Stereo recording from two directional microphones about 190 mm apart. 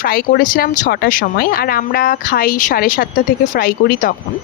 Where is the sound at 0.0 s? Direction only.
50° left (ahead or behind).